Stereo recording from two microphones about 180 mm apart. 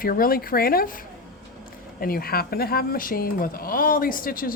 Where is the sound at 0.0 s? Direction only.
55° left (ahead or behind).